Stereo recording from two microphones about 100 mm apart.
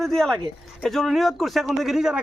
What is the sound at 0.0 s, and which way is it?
A woman's voice, 5° left (ahead or behind).